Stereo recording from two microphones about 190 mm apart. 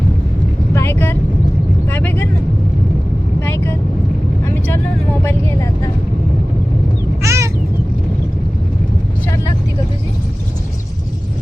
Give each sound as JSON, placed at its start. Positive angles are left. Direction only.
{"t": 0.7, "sound": "vehicle", "side_deg": 10}
{"t": 3.4, "sound": "vehicle", "side_deg": 10}
{"t": 7.2, "sound": "a sound", "side_deg": -15}